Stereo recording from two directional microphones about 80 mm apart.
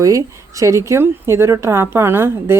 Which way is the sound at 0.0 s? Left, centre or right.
Right.